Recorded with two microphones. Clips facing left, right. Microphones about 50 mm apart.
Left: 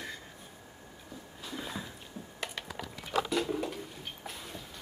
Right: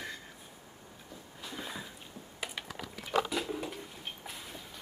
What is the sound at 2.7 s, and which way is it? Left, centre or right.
Pig, centre.